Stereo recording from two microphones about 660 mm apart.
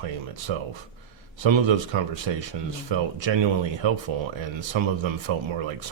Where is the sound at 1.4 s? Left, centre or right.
Right.